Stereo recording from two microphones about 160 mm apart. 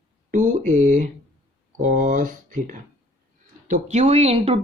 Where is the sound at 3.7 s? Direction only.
45° right (ahead or behind).